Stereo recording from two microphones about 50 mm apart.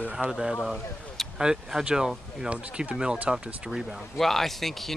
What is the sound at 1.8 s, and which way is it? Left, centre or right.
Speech, centre.